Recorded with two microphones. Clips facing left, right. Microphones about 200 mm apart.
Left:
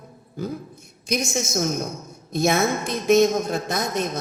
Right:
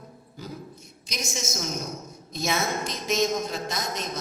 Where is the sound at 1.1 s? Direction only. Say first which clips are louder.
Left 8 dB; 55° left (ahead or behind).